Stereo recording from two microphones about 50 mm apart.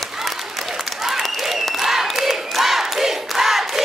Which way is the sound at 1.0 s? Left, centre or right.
Centre.